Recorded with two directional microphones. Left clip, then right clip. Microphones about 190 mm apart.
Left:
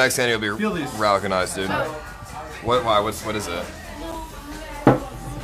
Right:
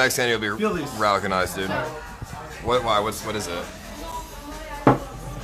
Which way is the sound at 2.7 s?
5° right (ahead or behind).